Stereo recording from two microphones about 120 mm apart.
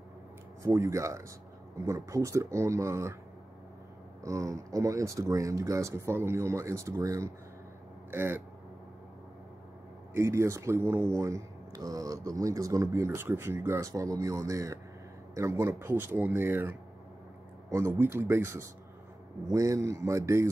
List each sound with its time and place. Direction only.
0.6 s speech: 25° right (ahead or behind)
4.2 s speech: 25° right (ahead or behind)
10.1 s speech: 25° right (ahead or behind)